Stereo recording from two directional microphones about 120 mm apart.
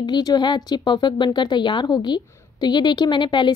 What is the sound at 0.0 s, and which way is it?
Speech, 35° left (ahead or behind).